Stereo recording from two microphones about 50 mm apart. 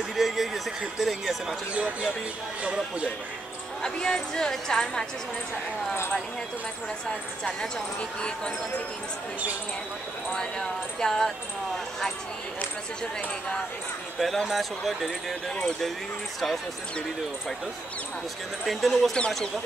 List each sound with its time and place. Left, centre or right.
0.1 s a sound: centre
0.9 s speech: centre
1.7 s speech: right
3.8 s a woman's voice: centre
7.4 s a woman's voice: centre
10.3 s a woman's voice: centre
14.2 s speech: centre
18.7 s speech: centre
19.1 s speech: centre